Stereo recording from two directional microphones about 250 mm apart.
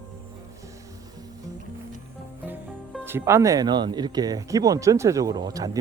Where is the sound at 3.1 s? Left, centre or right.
Centre.